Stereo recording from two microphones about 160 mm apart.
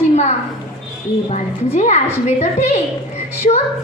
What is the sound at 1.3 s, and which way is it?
A woman's voice, 50° left (ahead or behind).